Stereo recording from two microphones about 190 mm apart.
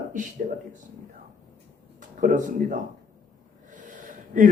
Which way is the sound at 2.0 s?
45° right (ahead or behind).